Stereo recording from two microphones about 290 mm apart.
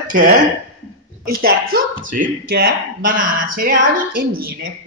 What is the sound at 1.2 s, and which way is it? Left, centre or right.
A woman's voice, right.